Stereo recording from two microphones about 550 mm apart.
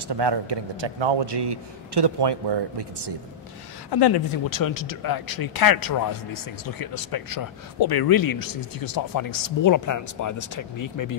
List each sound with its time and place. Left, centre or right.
0.1 s a man's voice: right
3.9 s speech: left